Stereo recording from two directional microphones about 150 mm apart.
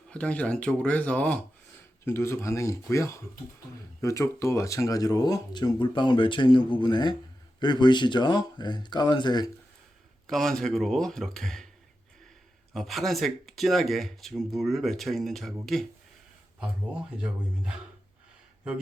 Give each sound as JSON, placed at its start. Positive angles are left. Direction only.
{"t": 0.1, "sound": "speech", "side_deg": 10}
{"t": 10.2, "sound": "speech", "side_deg": 0}
{"t": 12.7, "sound": "speech", "side_deg": 0}